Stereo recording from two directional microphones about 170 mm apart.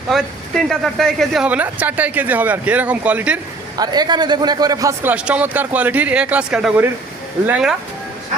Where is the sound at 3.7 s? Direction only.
25° right (ahead or behind).